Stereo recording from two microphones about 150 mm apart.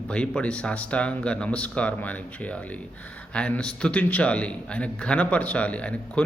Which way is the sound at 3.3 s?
5° left (ahead or behind).